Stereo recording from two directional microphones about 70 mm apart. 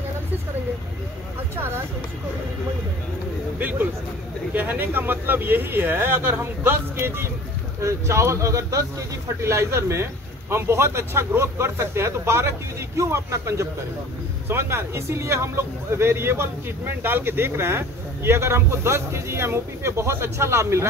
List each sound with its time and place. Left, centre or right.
3.5 s speech: right
9.4 s speech: right